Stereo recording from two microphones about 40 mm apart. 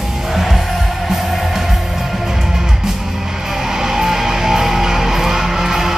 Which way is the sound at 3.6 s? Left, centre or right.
Centre.